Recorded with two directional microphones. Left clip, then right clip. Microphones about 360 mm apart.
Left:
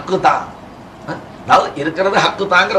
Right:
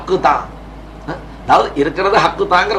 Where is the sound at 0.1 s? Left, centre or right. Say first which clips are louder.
Even; right.